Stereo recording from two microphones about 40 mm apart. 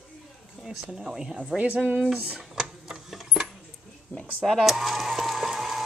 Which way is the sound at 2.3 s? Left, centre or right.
Centre.